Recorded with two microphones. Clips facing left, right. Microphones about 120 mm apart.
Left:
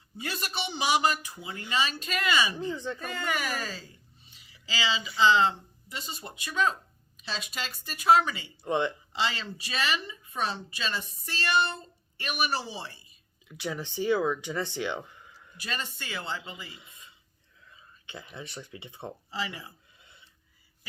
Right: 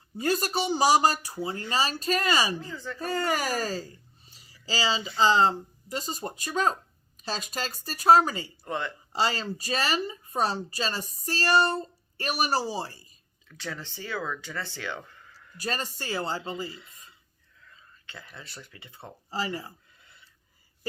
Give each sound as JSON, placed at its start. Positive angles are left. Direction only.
{"t": 0.2, "sound": "a woman's voice", "side_deg": -40}
{"t": 2.6, "sound": "speech", "side_deg": 20}
{"t": 3.0, "sound": "a woman's voice", "side_deg": -35}
{"t": 8.6, "sound": "speech", "side_deg": 20}
{"t": 9.1, "sound": "a woman's voice", "side_deg": -40}
{"t": 13.5, "sound": "speech", "side_deg": 15}
{"t": 15.5, "sound": "a woman's voice", "side_deg": -40}
{"t": 16.6, "sound": "speech", "side_deg": 15}
{"t": 19.3, "sound": "a woman's voice", "side_deg": -40}